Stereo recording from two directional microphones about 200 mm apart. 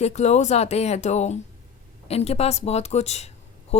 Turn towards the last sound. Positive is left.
turn(degrees=30)  # may be behind; listen again after turning